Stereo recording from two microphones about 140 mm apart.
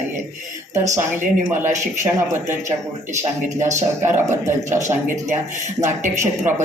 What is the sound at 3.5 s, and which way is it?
Speech, 20° right (ahead or behind).